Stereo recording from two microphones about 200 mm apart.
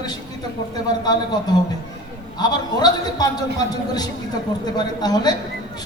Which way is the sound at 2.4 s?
20° left (ahead or behind).